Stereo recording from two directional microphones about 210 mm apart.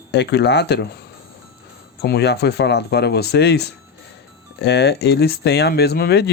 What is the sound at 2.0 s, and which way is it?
Speech, 50° left (ahead or behind).